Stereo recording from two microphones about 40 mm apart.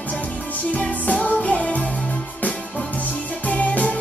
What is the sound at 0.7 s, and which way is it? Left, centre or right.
Music, left.